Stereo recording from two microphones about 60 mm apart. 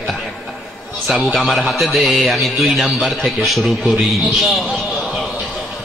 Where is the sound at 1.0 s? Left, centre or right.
Centre.